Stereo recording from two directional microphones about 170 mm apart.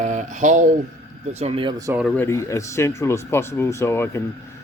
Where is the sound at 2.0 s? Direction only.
10° left (ahead or behind).